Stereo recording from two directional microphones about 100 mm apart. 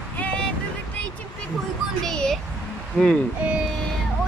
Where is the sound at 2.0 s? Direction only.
5° left (ahead or behind).